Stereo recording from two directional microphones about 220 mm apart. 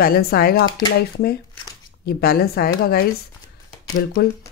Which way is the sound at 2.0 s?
45° left (ahead or behind).